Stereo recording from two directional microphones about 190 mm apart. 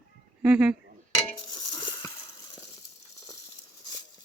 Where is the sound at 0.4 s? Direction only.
5° right (ahead or behind).